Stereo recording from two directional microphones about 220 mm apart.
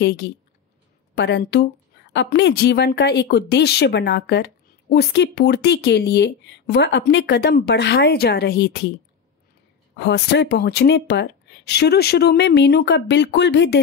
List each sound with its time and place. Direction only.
0.0 s a woman's voice: 50° left (ahead or behind)
9.9 s a woman's voice: 50° left (ahead or behind)